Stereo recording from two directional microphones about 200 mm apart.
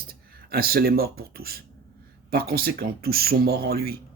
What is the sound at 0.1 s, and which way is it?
Speech, 50° right (ahead or behind).